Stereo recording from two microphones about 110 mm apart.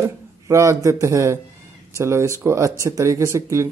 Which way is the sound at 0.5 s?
30° right (ahead or behind).